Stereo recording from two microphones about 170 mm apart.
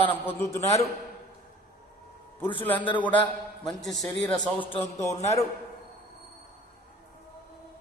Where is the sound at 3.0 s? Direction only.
10° left (ahead or behind).